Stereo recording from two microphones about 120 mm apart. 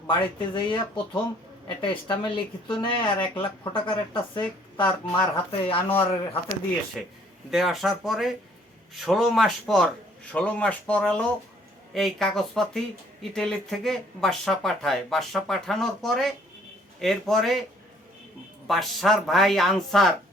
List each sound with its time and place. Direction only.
0.1 s a woman's voice: 40° left (ahead or behind)
7.0 s speech: centre (ahead or behind)
18.7 s speech: centre (ahead or behind)